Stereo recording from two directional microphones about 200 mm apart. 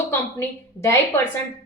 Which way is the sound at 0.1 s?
10° left (ahead or behind).